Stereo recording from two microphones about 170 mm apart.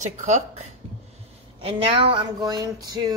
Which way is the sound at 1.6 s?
30° right (ahead or behind).